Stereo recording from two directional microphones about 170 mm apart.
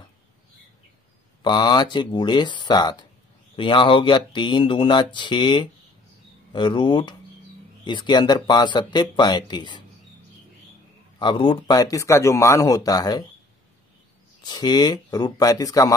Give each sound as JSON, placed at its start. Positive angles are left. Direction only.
{"t": 1.4, "sound": "speech", "side_deg": 25}
{"t": 11.1, "sound": "speech", "side_deg": 30}
{"t": 14.4, "sound": "speech", "side_deg": 25}